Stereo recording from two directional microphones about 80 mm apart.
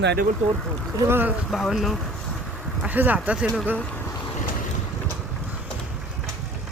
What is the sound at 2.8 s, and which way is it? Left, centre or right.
Speech, right.